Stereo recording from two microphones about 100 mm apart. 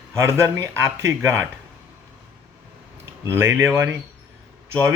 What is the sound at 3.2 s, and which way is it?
Speech, 30° right (ahead or behind).